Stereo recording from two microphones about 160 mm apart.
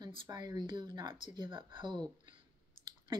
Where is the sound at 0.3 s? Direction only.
25° right (ahead or behind).